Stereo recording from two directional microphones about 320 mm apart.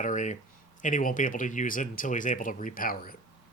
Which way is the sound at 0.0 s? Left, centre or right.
Left.